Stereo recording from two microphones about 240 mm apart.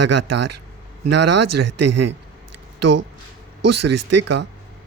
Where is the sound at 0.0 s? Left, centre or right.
Right.